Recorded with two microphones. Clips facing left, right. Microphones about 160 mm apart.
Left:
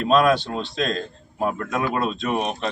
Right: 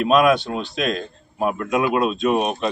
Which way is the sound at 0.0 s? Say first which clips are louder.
Right 2 dB; 10° right (ahead or behind).